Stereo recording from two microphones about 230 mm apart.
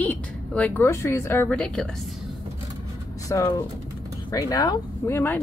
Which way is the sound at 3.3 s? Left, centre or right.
Centre.